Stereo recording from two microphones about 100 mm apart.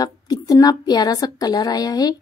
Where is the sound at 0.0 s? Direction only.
40° left (ahead or behind).